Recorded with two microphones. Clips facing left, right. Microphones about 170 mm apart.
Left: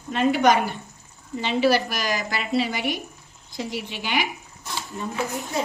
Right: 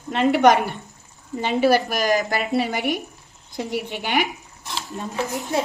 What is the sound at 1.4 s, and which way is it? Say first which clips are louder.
A woman's voice: right 2 dB; 45° right (ahead or behind).